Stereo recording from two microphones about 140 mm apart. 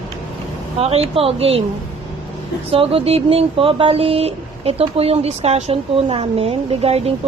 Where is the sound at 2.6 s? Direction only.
45° right (ahead or behind).